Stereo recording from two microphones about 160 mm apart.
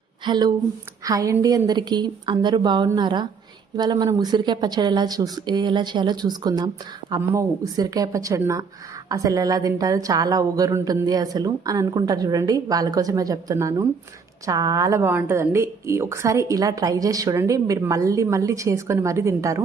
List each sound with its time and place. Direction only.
0.3 s a woman's voice: 25° right (ahead or behind)